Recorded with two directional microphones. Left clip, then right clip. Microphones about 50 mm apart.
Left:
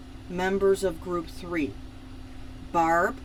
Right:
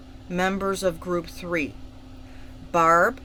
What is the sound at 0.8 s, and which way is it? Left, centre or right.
Speech, right.